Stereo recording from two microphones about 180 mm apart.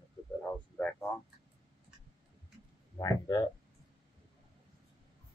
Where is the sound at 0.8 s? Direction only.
5° left (ahead or behind).